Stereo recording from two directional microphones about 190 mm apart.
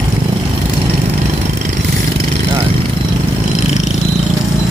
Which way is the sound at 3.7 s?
35° left (ahead or behind).